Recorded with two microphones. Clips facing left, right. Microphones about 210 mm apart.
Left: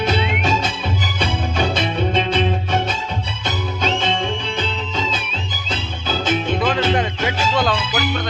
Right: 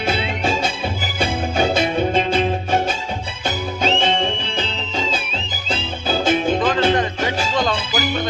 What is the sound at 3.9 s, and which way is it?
Music, 30° right (ahead or behind).